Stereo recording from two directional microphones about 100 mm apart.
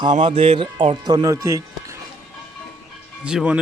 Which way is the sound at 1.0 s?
40° right (ahead or behind).